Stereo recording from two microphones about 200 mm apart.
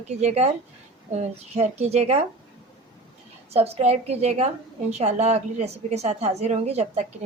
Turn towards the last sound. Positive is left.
turn(degrees=-35)  # may be behind; listen again after turning